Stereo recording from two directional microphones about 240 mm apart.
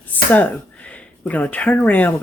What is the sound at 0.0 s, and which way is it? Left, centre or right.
Speech, centre.